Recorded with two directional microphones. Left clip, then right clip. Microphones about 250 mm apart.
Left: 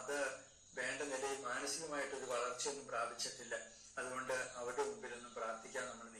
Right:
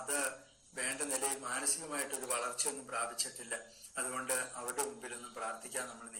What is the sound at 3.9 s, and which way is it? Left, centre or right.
Speech, right.